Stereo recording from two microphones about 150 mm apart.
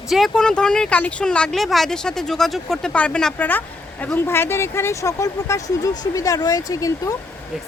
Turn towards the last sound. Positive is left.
turn(degrees=20)  # may be behind; listen again after turning